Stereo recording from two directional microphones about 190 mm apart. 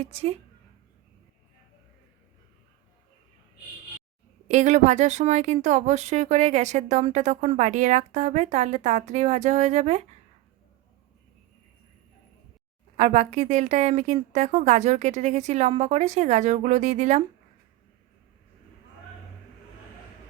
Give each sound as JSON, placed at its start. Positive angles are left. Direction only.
{"t": 0.0, "sound": "speech", "side_deg": -30}
{"t": 4.4, "sound": "speech", "side_deg": -40}
{"t": 13.0, "sound": "speech", "side_deg": -40}